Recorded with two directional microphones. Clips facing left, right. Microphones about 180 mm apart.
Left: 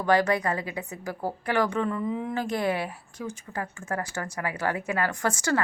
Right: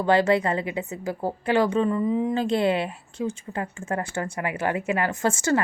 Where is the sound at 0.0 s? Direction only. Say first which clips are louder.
Right 3 dB; 25° right (ahead or behind).